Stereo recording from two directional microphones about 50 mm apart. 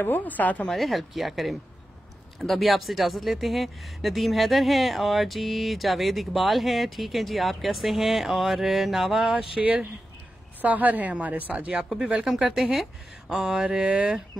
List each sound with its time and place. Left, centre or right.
0.0 s speech: left
0.7 s speech: centre
10.6 s speech: right
12.3 s mantra: centre